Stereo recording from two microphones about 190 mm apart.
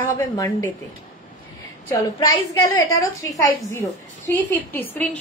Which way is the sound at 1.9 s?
15° left (ahead or behind).